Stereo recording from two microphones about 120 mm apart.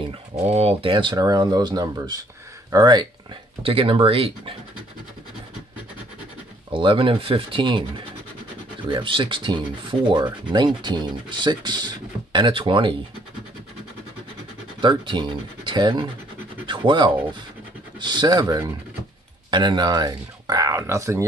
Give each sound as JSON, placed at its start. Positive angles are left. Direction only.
{"t": 0.4, "sound": "speech", "side_deg": -60}
{"t": 1.2, "sound": "speech", "side_deg": -30}
{"t": 3.6, "sound": "speech", "side_deg": -50}
{"t": 6.7, "sound": "speech", "side_deg": -45}
{"t": 8.8, "sound": "speech", "side_deg": -45}
{"t": 14.8, "sound": "speech", "side_deg": -40}